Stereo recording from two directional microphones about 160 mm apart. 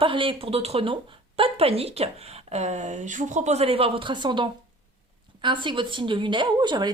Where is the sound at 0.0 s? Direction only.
30° right (ahead or behind).